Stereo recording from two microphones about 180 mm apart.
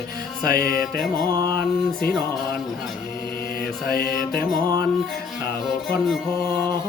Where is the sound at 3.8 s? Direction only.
55° left (ahead or behind).